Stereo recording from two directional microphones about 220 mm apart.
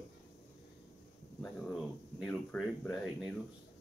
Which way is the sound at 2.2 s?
5° left (ahead or behind).